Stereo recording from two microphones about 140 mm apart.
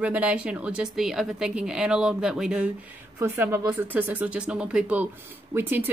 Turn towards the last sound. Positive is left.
turn(degrees=-15)  # may be behind; listen again after turning